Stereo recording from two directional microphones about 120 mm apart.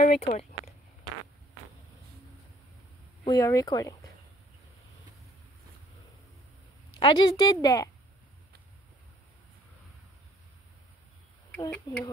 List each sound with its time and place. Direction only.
0.0 s speech: 75° left (ahead or behind)
3.3 s speech: 30° left (ahead or behind)
7.0 s a woman's voice: 40° left (ahead or behind)
11.9 s a woman's voice: 35° left (ahead or behind)